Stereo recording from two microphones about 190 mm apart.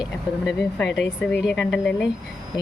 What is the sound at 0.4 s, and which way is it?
Speech, centre (ahead or behind).